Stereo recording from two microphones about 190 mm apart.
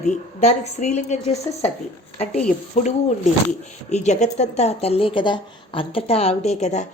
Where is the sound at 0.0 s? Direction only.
35° left (ahead or behind).